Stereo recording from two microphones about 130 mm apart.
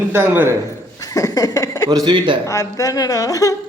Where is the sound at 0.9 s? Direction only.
25° left (ahead or behind).